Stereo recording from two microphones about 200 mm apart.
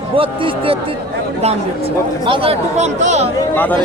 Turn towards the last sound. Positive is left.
turn(degrees=10)  # may be behind; listen again after turning